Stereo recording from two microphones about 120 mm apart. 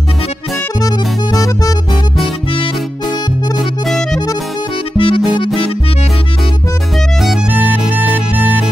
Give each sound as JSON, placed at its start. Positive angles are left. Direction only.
{"t": 0.7, "sound": "music", "side_deg": 30}
{"t": 3.5, "sound": "music", "side_deg": 0}
{"t": 4.9, "sound": "music", "side_deg": 45}